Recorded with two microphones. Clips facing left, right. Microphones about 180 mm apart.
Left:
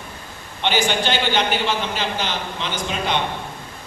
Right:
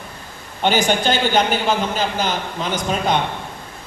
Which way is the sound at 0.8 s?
45° right (ahead or behind).